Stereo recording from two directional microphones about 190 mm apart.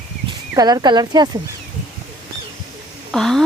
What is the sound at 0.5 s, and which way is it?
Speech, 20° right (ahead or behind).